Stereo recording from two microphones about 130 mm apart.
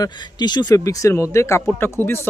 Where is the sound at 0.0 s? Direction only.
35° left (ahead or behind).